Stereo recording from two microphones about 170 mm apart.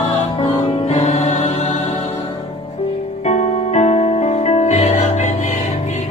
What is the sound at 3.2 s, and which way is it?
Music, 40° left (ahead or behind).